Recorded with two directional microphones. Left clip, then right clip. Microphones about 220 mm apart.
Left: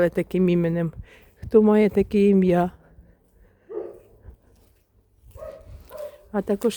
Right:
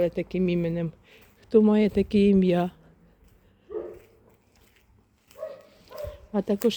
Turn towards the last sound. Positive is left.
turn(degrees=5)  # may be behind; listen again after turning